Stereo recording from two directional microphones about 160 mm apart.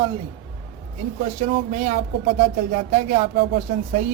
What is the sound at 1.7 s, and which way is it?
Speech, 50° right (ahead or behind).